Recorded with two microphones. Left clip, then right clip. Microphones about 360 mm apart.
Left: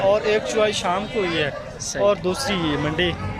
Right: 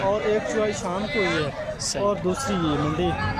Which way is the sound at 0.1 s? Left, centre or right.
Left.